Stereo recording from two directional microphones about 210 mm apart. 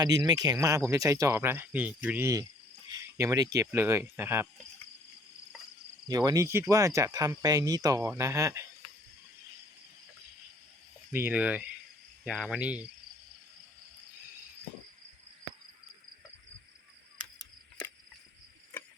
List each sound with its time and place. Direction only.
0.0 s speech: 15° right (ahead or behind)
6.1 s speech: 15° right (ahead or behind)
11.1 s speech: 10° right (ahead or behind)